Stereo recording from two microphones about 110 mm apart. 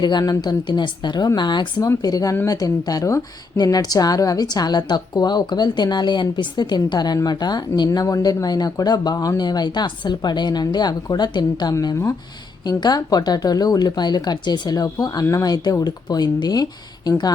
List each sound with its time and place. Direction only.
0.0 s speech: 40° left (ahead or behind)